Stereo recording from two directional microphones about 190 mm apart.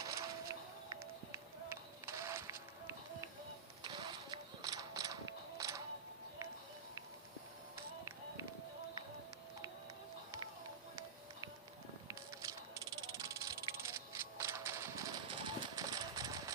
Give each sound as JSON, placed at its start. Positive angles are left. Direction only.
{"t": 0.0, "sound": "music", "side_deg": -15}
{"t": 3.8, "sound": "mechanisms", "side_deg": -25}
{"t": 5.5, "sound": "music", "side_deg": -15}
{"t": 12.0, "sound": "a sound", "side_deg": -20}